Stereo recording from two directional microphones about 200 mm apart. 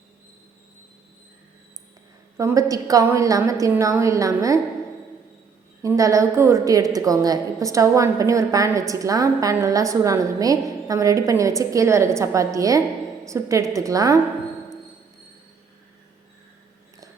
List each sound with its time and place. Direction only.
2.4 s a woman's voice: 15° right (ahead or behind)
5.8 s a woman's voice: 15° right (ahead or behind)